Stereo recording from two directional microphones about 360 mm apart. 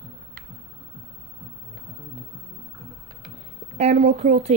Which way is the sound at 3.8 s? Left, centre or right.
Centre.